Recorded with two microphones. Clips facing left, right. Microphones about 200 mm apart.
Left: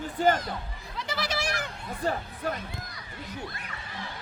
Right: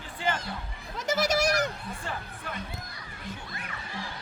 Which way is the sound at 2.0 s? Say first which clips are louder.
Left 11 dB; 40° left (ahead or behind).